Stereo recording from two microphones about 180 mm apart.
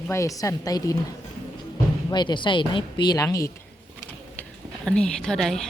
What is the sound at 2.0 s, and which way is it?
Speech, 25° left (ahead or behind).